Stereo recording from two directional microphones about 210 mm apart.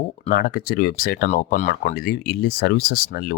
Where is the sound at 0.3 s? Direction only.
45° left (ahead or behind).